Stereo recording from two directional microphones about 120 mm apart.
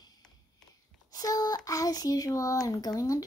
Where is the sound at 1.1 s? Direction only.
30° left (ahead or behind).